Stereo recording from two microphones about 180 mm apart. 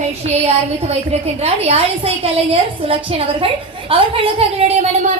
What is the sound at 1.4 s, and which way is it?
A woman's voice, 35° right (ahead or behind).